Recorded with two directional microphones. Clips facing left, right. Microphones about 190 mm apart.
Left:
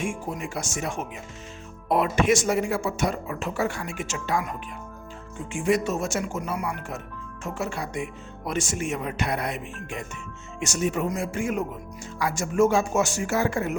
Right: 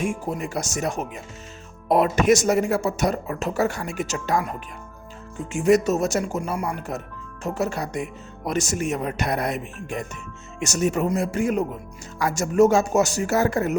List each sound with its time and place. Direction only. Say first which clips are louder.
0.0 s speech: right 4 dB; 40° right (ahead or behind)